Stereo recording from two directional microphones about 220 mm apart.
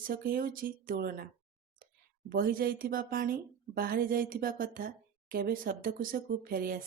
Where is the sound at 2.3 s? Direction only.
40° right (ahead or behind).